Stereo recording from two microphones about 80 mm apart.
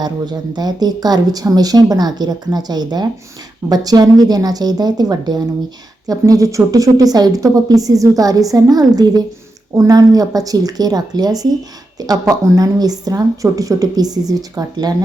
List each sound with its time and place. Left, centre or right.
0.0 s speech: right
6.1 s a woman's voice: right